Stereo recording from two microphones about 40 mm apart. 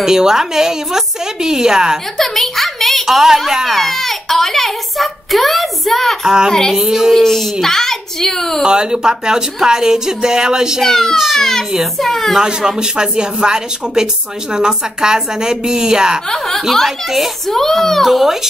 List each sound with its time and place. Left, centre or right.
0.0 s speech: centre
2.1 s a sound: centre
3.1 s speech: centre
3.7 s a child's voice: centre
6.2 s speech: centre
7.2 s a child's voice: centre
8.6 s speech: right
10.8 s a child's voice: centre
12.4 s speech: centre
16.3 s a child's voice: centre
18.0 s speech: centre